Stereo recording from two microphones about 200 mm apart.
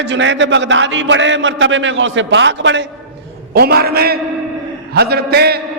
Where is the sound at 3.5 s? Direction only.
50° right (ahead or behind).